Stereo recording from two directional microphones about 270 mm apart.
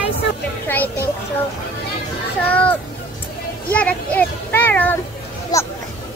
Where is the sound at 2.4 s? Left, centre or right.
Centre.